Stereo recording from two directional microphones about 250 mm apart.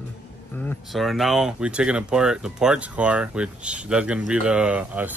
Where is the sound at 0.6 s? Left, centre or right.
Centre.